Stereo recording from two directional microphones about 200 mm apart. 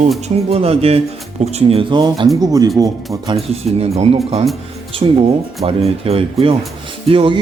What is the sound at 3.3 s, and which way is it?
Speech, 30° right (ahead or behind).